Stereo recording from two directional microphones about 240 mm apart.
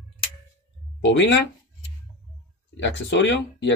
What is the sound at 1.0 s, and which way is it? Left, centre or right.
Speech, left.